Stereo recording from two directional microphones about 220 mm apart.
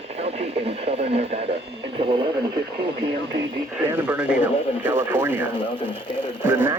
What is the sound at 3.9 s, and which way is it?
Speech, 5° right (ahead or behind).